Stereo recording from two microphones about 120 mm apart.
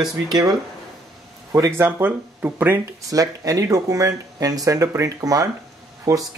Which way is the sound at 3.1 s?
30° right (ahead or behind).